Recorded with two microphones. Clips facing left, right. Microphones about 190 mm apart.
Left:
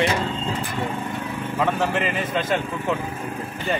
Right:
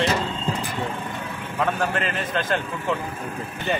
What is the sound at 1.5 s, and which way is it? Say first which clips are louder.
A man's voice: left 1 dB; 5° left (ahead or behind).